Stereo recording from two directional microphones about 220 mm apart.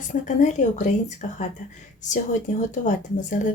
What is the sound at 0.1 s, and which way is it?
Speech, 35° left (ahead or behind).